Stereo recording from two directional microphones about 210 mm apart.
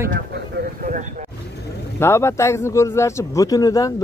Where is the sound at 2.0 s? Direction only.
10° left (ahead or behind).